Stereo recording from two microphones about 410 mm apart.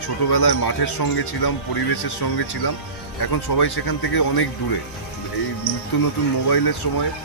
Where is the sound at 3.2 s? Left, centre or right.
Left.